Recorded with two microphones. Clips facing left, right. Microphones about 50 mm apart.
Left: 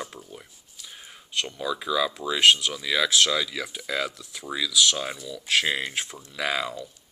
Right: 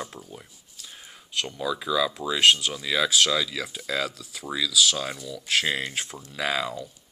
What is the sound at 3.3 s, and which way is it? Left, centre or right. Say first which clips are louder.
Speech: right 1 dB; centre.